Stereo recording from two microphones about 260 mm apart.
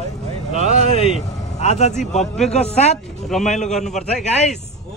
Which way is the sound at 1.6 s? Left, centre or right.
Left.